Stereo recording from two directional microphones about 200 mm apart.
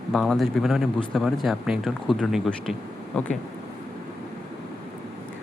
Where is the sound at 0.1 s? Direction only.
Centre (ahead or behind).